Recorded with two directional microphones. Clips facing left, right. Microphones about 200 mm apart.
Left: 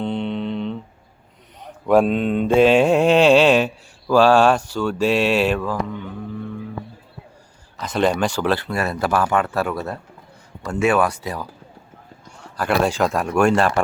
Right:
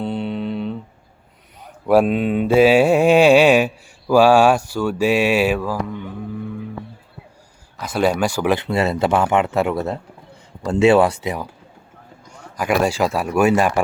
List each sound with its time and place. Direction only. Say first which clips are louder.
0.0 s a sound: even; 5° right (ahead or behind)
1.9 s mantra: right 1 dB; 5° right (ahead or behind)
7.8 s speech: right 1 dB; 10° right (ahead or behind)
12.5 s mantra: right 1 dB; 10° right (ahead or behind)